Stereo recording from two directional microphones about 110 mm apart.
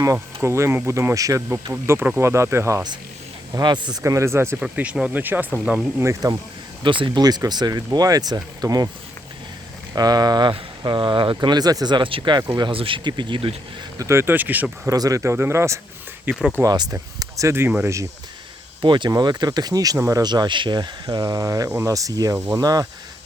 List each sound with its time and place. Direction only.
0.0 s speech: 30° right (ahead or behind)
3.5 s speech: 45° right (ahead or behind)
4.0 s speech: 25° right (ahead or behind)
4.6 s speech: 10° right (ahead or behind)
6.0 s speech: 25° right (ahead or behind)
6.8 s speech: 50° right (ahead or behind)
9.9 s speech: 35° right (ahead or behind)
14.0 s speech: 25° right (ahead or behind)
14.8 s speech: 35° right (ahead or behind); by 16.4 s 15° right (ahead or behind)
16.6 s speech: 35° right (ahead or behind)
18.8 s speech: 45° right (ahead or behind)